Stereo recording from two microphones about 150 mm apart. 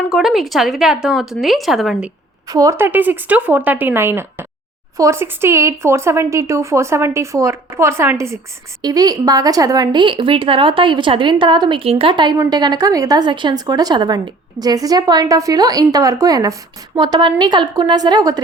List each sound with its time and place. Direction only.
0.1 s speech: centre (ahead or behind)
2.5 s a woman's voice: 20° right (ahead or behind)